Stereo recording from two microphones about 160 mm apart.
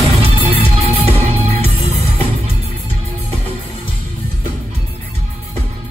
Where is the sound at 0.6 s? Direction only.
40° right (ahead or behind).